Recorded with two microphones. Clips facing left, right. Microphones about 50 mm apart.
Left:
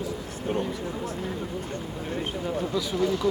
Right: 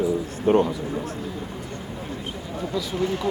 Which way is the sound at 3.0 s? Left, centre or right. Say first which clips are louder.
Left 1 dB; right.